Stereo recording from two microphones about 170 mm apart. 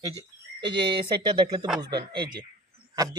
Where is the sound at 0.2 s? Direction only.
30° right (ahead or behind).